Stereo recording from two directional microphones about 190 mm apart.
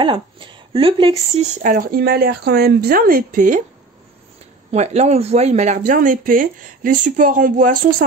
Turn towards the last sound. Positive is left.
turn(degrees=-45)  # may be behind; listen again after turning